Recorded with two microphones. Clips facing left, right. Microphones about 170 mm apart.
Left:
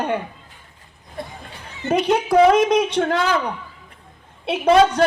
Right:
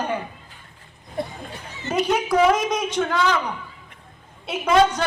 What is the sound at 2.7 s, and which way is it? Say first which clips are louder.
Speech: left 5 dB; 30° left (ahead or behind).